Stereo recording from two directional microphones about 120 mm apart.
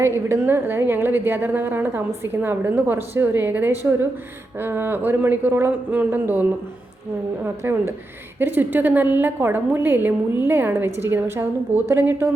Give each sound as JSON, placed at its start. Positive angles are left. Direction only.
{"t": 0.0, "sound": "a woman's voice", "side_deg": -20}
{"t": 7.4, "sound": "a woman's voice", "side_deg": -20}